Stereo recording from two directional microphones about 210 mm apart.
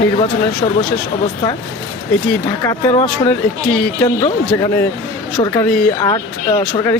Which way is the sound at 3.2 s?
10° left (ahead or behind).